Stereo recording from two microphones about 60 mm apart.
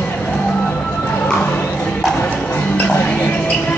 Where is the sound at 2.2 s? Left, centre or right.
Left.